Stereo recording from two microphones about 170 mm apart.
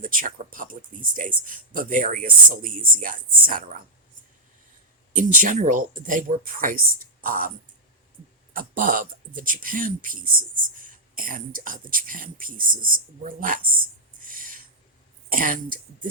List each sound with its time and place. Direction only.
0.0 s speech: 55° right (ahead or behind)
5.1 s speech: 50° right (ahead or behind)
8.5 s speech: 55° right (ahead or behind)
14.3 s a sound: 55° right (ahead or behind)
15.3 s speech: 55° right (ahead or behind)